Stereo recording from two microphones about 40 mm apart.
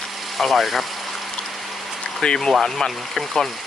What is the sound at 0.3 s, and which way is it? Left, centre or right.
Speech, centre.